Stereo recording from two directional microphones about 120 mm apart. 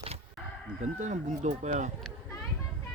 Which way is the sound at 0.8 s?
85° right.